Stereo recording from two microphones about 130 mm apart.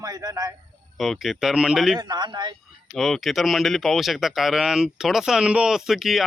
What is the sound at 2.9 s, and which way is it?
Speech, centre (ahead or behind).